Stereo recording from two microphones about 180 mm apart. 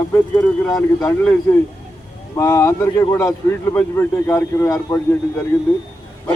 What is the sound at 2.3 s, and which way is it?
Speech, 15° left (ahead or behind).